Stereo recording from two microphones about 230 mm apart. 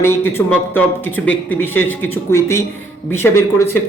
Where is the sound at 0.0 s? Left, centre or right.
Centre.